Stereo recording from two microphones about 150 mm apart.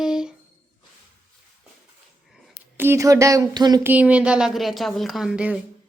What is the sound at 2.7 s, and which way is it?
Speech, 15° right (ahead or behind).